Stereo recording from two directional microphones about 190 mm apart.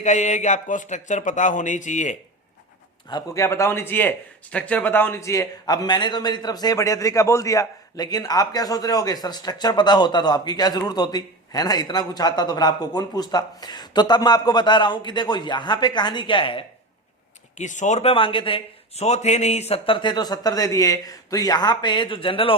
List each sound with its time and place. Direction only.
0.0 s speech: 40° left (ahead or behind)
3.1 s a man's voice: 20° left (ahead or behind)
17.6 s a man's voice: 40° left (ahead or behind)